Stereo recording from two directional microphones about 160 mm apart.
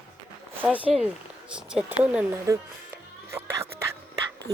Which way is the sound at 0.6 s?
10° right (ahead or behind).